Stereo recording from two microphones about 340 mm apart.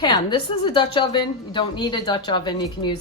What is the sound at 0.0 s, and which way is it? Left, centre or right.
A woman's voice, centre.